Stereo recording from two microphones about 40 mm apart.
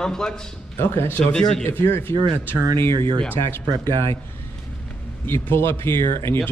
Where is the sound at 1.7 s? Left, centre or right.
Left.